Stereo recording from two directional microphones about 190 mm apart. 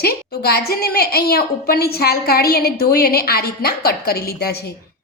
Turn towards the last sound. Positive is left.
turn(degrees=55)  # may be behind; listen again after turning